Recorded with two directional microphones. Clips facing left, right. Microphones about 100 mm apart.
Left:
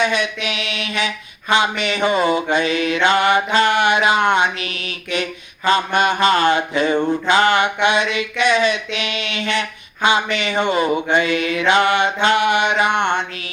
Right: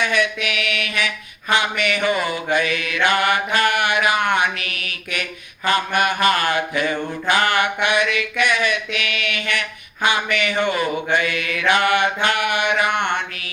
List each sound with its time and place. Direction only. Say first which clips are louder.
0.0 s mantra: left 1 dB; 20° left (ahead or behind)